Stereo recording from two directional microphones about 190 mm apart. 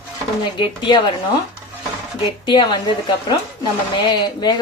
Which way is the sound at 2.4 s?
25° left (ahead or behind).